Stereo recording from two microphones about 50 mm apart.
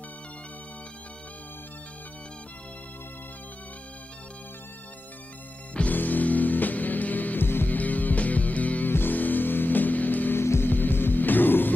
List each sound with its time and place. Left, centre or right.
5.8 s music: left
7.4 s music: left
7.7 s music: left
10.4 s music: left
10.7 s music: left